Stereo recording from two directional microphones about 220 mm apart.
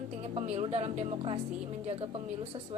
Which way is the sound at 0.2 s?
30° right (ahead or behind).